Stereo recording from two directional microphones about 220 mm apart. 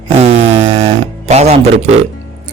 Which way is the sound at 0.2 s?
30° right (ahead or behind).